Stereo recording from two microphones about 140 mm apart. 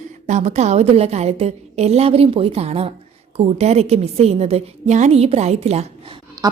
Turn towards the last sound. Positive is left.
turn(degrees=-25)  # may be behind; listen again after turning